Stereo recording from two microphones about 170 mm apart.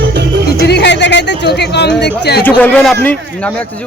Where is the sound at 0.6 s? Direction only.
75° left (ahead or behind).